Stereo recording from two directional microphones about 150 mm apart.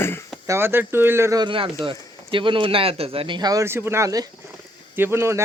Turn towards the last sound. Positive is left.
turn(degrees=-15)  # may be behind; listen again after turning